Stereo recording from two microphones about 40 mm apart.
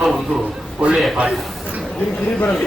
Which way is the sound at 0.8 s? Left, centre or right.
Right.